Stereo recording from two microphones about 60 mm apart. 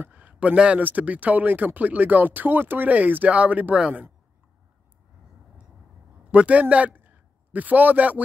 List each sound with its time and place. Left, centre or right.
0.1 s a sound: right
0.8 s speech: right
6.3 s a man's voice: right